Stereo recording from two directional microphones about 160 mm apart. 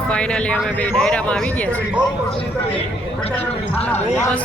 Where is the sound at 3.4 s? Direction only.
10° left (ahead or behind).